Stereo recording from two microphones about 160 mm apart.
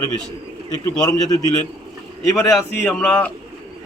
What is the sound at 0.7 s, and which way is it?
Speech, 20° left (ahead or behind).